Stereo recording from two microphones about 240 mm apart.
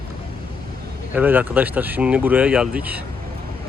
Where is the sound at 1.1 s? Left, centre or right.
Centre.